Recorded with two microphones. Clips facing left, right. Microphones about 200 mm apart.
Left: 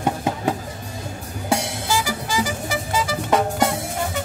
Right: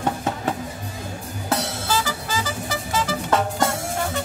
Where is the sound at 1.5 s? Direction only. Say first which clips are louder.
Left 2 dB; 10° left (ahead or behind).